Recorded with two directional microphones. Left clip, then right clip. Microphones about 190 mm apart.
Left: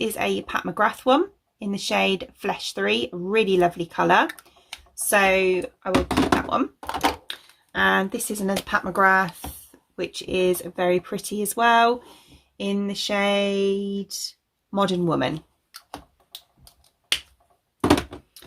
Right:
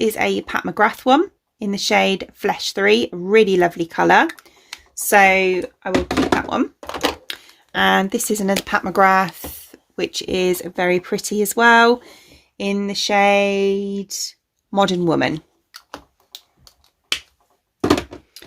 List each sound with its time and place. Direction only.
0.0 s speech: 45° right (ahead or behind)
6.7 s a sound: 5° right (ahead or behind)
7.3 s speech: 50° right (ahead or behind)